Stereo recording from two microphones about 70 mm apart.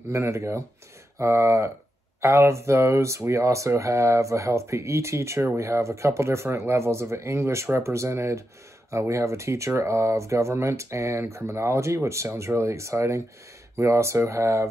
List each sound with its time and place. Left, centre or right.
0.1 s speech: right